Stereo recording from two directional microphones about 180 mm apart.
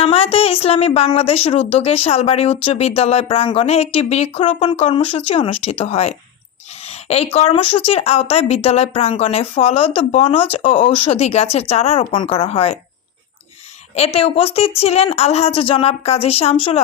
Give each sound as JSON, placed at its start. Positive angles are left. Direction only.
{"t": 0.0, "sound": "a woman's voice", "side_deg": 30}
{"t": 13.9, "sound": "a woman's voice", "side_deg": 35}